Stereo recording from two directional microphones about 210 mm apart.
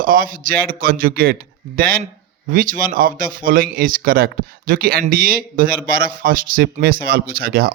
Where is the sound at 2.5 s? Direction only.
40° right (ahead or behind).